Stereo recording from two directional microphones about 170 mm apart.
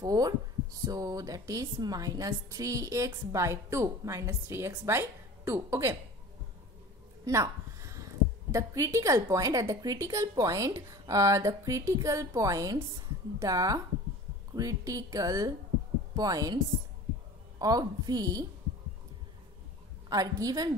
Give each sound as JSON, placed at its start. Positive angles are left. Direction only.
{"t": 0.0, "sound": "speech", "side_deg": -20}
{"t": 7.2, "sound": "speech", "side_deg": -20}
{"t": 17.6, "sound": "speech", "side_deg": -25}
{"t": 20.1, "sound": "speech", "side_deg": -20}